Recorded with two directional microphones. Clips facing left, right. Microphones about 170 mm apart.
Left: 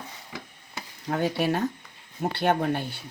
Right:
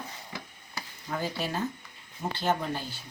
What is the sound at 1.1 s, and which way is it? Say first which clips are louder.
Speech: left 7 dB; 65° left (ahead or behind).